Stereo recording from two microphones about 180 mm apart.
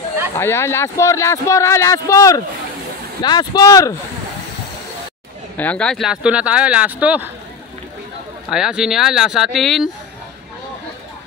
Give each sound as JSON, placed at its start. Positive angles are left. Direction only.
{"t": 0.4, "sound": "speech", "side_deg": 15}
{"t": 5.6, "sound": "speech", "side_deg": 5}
{"t": 8.5, "sound": "speech", "side_deg": -5}